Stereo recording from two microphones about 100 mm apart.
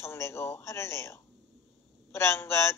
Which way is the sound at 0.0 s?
25° left (ahead or behind).